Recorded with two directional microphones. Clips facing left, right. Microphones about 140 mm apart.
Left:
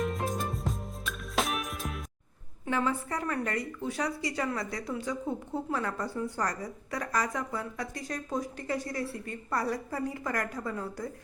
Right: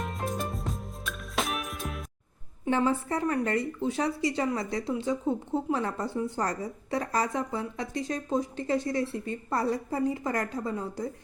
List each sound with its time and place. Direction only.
0.0 s music: centre (ahead or behind)
2.6 s a woman's voice: 30° right (ahead or behind)